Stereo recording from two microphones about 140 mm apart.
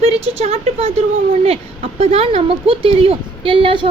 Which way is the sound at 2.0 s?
45° right (ahead or behind).